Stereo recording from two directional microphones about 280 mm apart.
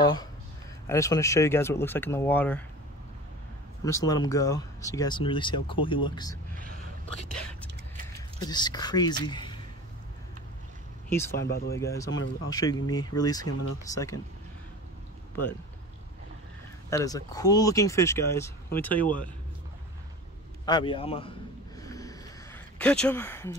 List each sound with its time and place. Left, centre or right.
0.0 s speech: centre
3.8 s speech: centre
8.4 s speech: centre
11.1 s speech: centre
11.4 s speech: left
11.7 s speech: centre
13.5 s speech: left
13.9 s speech: centre
16.9 s speech: centre
20.6 s a man's voice: centre
21.8 s a sound: centre